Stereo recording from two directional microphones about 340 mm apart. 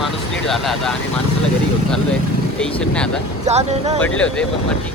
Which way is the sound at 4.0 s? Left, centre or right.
Centre.